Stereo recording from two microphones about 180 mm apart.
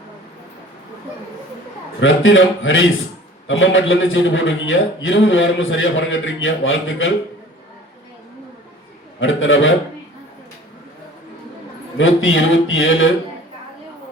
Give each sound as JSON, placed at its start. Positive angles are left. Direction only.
{"t": 2.0, "sound": "a man's voice", "side_deg": 90}
{"t": 9.2, "sound": "a man's voice", "side_deg": 90}
{"t": 11.9, "sound": "a man's voice", "side_deg": 90}